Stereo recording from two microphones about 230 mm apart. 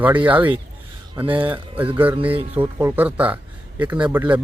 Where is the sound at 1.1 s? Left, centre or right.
Right.